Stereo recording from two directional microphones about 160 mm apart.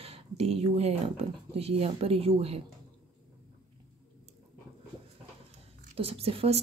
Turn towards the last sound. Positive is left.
turn(degrees=-40)  # may be behind; listen again after turning